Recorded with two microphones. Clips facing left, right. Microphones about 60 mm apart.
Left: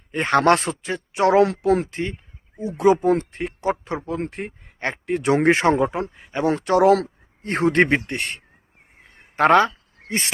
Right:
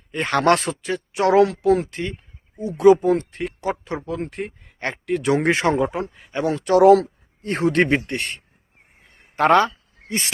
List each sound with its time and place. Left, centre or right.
0.1 s speech: left
0.8 s speech: left
1.9 s speech: left
9.4 s a sound: left